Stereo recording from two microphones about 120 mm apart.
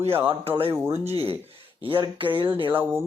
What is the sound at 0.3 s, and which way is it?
Speech, 50° right (ahead or behind).